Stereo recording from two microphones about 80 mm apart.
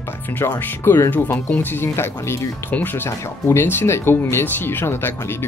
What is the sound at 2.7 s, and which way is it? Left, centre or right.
Speech, left.